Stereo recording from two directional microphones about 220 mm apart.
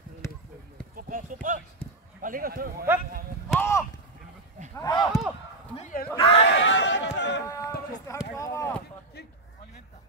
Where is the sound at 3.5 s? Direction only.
10° left (ahead or behind).